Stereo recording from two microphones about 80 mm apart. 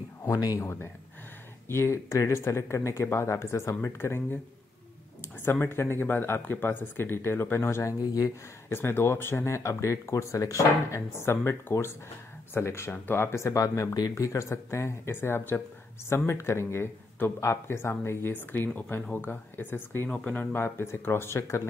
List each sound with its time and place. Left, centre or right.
0.2 s speech: left
0.6 s speech: left
5.4 s speech: left
20.1 s speech: centre
20.5 s speech: left